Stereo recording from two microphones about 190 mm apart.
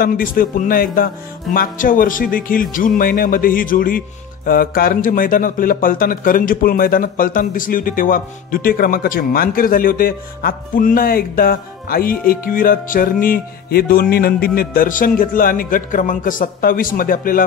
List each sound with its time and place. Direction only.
0.0 s speech: 50° left (ahead or behind)